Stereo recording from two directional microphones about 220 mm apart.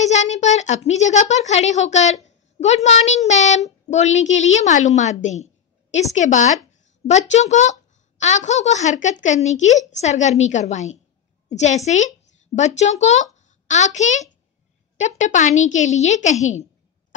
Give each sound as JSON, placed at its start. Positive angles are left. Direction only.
{"t": 0.0, "sound": "a woman's voice", "side_deg": 30}